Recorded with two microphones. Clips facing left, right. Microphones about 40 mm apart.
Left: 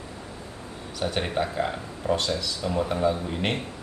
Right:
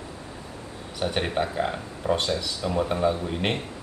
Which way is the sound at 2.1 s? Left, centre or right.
Centre.